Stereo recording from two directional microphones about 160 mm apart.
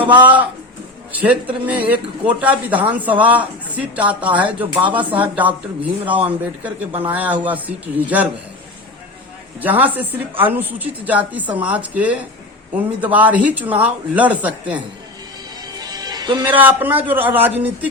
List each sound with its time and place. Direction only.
0.1 s a woman's voice: 10° right (ahead or behind)
1.6 s a woman's voice: 10° right (ahead or behind)
9.6 s a woman's voice: 10° right (ahead or behind)
15.6 s music: 25° right (ahead or behind)
16.6 s a woman's voice: 10° right (ahead or behind)